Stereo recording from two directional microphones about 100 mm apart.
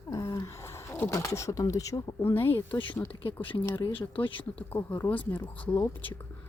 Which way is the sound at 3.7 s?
40° left (ahead or behind).